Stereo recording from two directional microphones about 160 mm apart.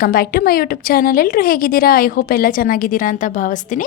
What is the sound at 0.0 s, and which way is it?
A woman's voice, 65° left (ahead or behind).